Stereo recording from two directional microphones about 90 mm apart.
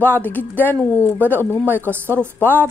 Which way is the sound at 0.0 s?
20° left (ahead or behind).